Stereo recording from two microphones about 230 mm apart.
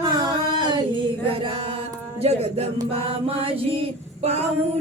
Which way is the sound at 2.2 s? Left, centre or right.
Right.